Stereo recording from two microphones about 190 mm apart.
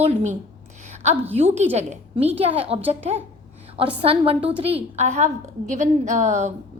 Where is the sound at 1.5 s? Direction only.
35° right (ahead or behind).